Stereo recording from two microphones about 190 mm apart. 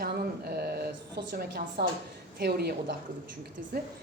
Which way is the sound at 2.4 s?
55° right (ahead or behind).